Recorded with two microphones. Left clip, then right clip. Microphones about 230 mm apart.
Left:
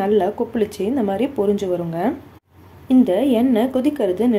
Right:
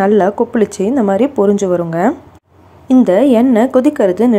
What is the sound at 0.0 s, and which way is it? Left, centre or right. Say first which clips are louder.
A woman's voice: right 7 dB; right.